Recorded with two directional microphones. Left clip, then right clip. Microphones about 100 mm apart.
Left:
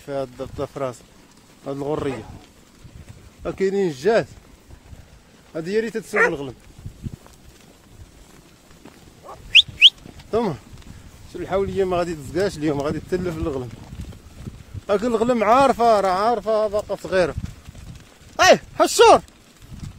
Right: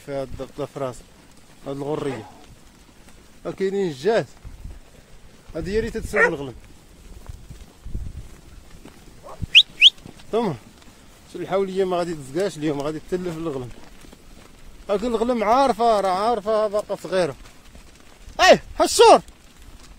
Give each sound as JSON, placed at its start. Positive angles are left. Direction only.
{"t": 0.0, "sound": "speech", "side_deg": 25}
{"t": 1.6, "sound": "speech", "side_deg": 40}
{"t": 3.4, "sound": "speech", "side_deg": 50}
{"t": 5.5, "sound": "speech", "side_deg": 25}
{"t": 9.5, "sound": "bird", "side_deg": 25}
{"t": 11.3, "sound": "speech", "side_deg": 0}
{"t": 11.8, "sound": "speech", "side_deg": 20}
{"t": 12.4, "sound": "speech", "side_deg": 45}
{"t": 14.9, "sound": "speech", "side_deg": 45}
{"t": 15.5, "sound": "speech", "side_deg": 50}
{"t": 16.3, "sound": "speech", "side_deg": 25}
{"t": 18.3, "sound": "a sound", "side_deg": 50}
{"t": 18.8, "sound": "speech", "side_deg": 30}